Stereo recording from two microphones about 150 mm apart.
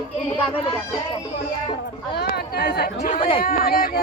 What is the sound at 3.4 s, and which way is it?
Speech, 75° left (ahead or behind).